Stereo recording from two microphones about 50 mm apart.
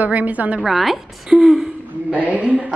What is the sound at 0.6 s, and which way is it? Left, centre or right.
A woman's voice, centre.